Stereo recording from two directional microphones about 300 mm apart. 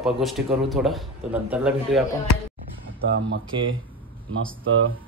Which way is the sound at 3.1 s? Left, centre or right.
Right.